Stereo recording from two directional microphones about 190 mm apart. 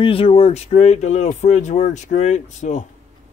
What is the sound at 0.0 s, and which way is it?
Speech, 30° left (ahead or behind).